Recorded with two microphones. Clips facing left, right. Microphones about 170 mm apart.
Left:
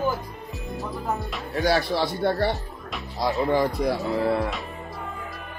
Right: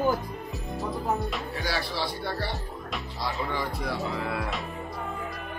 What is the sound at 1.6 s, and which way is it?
Speech, 50° left (ahead or behind).